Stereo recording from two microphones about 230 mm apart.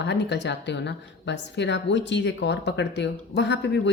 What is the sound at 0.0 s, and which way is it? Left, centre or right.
A woman's voice, left.